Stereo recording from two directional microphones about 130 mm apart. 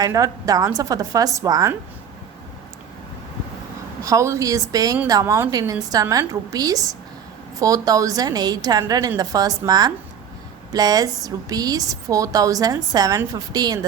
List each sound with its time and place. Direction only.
0.0 s speech: 25° right (ahead or behind)
4.0 s speech: 25° right (ahead or behind)